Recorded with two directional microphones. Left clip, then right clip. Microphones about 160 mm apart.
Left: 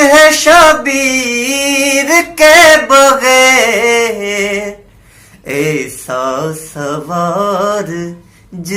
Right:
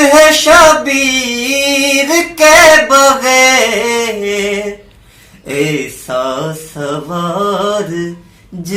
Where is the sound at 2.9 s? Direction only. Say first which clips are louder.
Left 1 dB; 35° left (ahead or behind).